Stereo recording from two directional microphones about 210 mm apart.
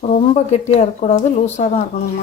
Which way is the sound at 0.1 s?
30° left (ahead or behind).